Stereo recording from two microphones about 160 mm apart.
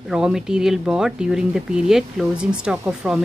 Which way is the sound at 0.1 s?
5° right (ahead or behind).